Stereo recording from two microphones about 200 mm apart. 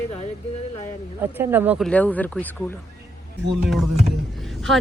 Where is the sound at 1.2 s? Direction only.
10° right (ahead or behind).